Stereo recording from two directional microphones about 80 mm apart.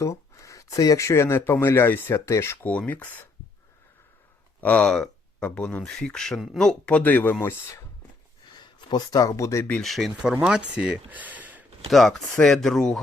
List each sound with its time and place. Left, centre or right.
0.0 s speech: left
2.2 s speech: left
2.6 s speech: left
4.6 s speech: centre
6.9 s speech: left
7.4 s speech: left
8.5 s speech: left
9.8 s speech: centre; by 11.6 s right
11.9 s speech: centre